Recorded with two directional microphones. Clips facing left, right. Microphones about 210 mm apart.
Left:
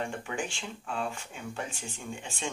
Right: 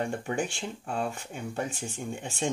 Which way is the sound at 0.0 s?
40° right (ahead or behind).